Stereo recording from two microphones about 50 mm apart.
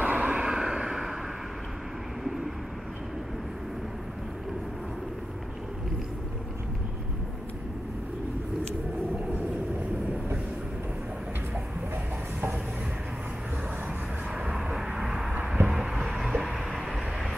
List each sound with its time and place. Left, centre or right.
0.0 s vehicle: right
0.4 s vehicle: centre
2.2 s vehicle: centre
14.5 s vehicle: centre
15.6 s a sound: centre
16.2 s vehicle: centre